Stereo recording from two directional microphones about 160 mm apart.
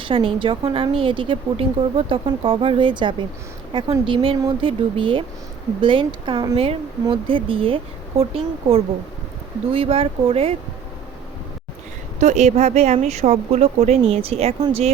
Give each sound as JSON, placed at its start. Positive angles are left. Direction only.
{"t": 0.0, "sound": "a woman's voice", "side_deg": -30}
{"t": 12.2, "sound": "speech", "side_deg": -45}